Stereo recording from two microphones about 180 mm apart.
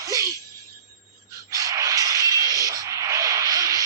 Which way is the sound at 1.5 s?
20° right (ahead or behind).